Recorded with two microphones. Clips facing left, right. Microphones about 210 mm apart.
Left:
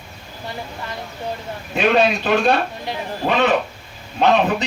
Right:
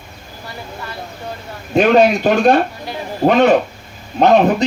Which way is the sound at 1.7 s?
40° right (ahead or behind).